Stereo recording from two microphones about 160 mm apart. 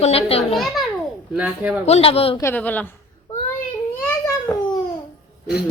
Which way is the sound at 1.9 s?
40° left (ahead or behind).